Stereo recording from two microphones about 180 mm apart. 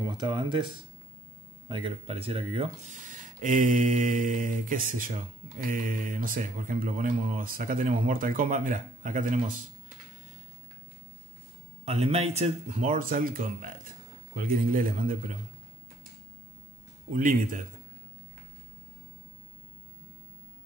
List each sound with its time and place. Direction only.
0.0 s speech: 25° right (ahead or behind)
1.7 s speech: 30° right (ahead or behind)
3.1 s speech: 45° right (ahead or behind)
11.8 s speech: 35° right (ahead or behind)
17.1 s speech: 50° right (ahead or behind)